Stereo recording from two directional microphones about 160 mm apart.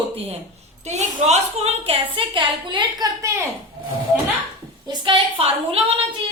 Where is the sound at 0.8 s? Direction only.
45° right (ahead or behind); by 3.4 s 20° right (ahead or behind).